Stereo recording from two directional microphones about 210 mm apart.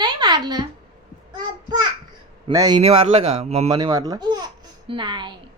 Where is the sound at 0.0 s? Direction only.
20° right (ahead or behind).